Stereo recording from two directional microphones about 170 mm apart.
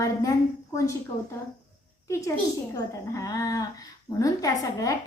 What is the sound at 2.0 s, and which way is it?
A child's voice, 15° left (ahead or behind).